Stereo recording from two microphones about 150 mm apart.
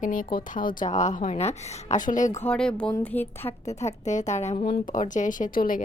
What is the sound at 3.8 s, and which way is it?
Speech, 50° left (ahead or behind).